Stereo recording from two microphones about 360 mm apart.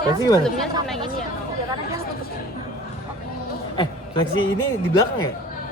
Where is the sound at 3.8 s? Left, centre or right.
Centre.